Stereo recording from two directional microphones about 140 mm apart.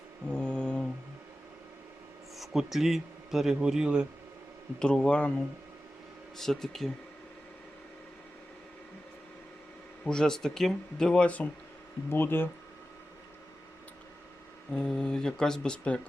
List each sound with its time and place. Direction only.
0.3 s mantra: 10° left (ahead or behind)
2.4 s a man's voice: centre (ahead or behind)
4.8 s speech: 5° left (ahead or behind)
6.3 s speech: 5° left (ahead or behind)
10.0 s speech: 5° left (ahead or behind)
14.7 s speech: 5° left (ahead or behind)